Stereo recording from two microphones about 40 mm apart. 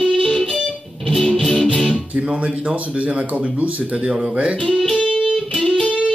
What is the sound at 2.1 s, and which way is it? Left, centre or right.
Speech, right.